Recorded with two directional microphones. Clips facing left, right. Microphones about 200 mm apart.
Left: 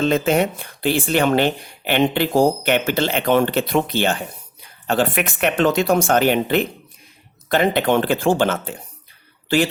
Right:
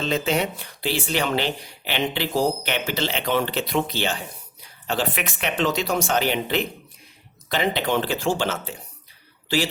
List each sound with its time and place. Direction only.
0.0 s speech: 50° left (ahead or behind)